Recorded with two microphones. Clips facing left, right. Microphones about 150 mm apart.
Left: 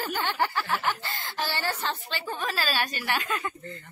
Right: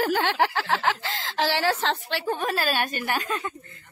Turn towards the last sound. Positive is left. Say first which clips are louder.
# right 2 dB
turn(degrees=-40)  # may be behind; listen again after turning